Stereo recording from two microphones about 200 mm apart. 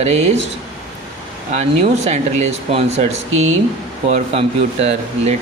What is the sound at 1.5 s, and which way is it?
Speech, 35° right (ahead or behind).